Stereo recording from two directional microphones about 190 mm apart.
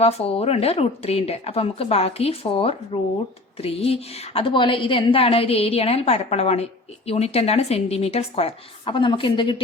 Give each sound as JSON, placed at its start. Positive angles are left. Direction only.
{"t": 0.0, "sound": "a woman's voice", "side_deg": 30}